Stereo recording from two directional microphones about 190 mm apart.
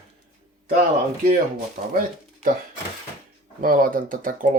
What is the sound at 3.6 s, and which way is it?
Speech, 50° right (ahead or behind).